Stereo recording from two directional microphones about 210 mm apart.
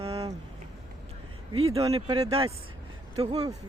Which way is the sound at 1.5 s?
30° right (ahead or behind).